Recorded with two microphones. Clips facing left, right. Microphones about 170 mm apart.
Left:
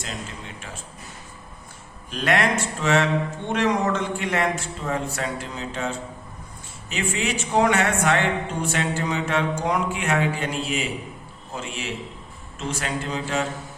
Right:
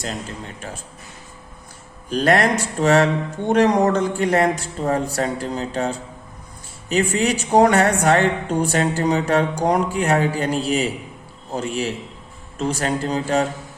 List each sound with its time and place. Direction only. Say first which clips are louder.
2.0 s speech: right 5 dB; 40° right (ahead or behind)